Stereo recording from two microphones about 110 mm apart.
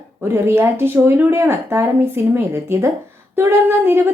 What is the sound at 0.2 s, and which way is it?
A woman's voice, 20° right (ahead or behind).